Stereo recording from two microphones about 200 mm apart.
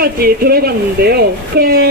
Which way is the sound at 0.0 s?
50° right (ahead or behind).